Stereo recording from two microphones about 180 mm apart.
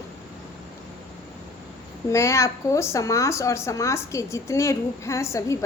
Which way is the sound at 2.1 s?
15° left (ahead or behind).